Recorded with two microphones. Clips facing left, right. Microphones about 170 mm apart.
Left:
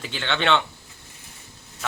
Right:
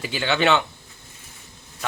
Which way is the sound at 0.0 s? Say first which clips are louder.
Right 4 dB; 5° right (ahead or behind).